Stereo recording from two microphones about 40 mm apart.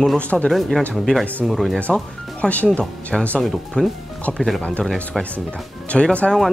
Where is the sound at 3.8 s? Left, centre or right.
Left.